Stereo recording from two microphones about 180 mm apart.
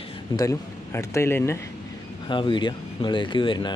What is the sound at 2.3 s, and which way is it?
Speech, 25° left (ahead or behind).